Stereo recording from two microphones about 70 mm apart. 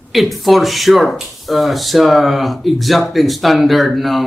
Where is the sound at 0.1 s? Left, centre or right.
Centre.